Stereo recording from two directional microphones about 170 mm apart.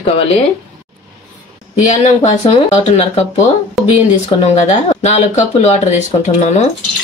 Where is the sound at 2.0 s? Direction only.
40° left (ahead or behind).